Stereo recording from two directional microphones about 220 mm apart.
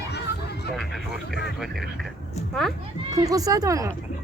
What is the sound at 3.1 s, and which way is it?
Speech, 15° right (ahead or behind).